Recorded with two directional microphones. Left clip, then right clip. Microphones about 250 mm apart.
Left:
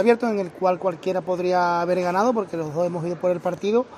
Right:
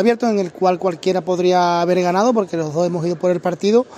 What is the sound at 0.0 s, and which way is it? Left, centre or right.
A man's voice, right.